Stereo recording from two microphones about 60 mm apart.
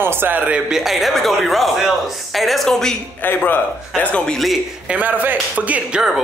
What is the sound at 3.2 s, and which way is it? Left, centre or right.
Speech, left.